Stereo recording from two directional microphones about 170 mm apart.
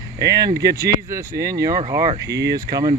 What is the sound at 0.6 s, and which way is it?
Speech, 20° right (ahead or behind).